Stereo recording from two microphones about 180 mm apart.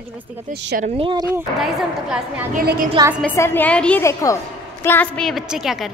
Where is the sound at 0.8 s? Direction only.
30° right (ahead or behind).